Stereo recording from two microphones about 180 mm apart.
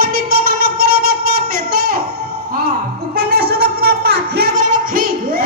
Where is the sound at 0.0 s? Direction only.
55° right (ahead or behind).